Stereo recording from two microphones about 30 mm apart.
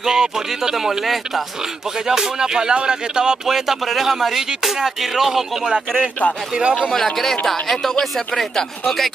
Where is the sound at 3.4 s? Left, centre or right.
Centre.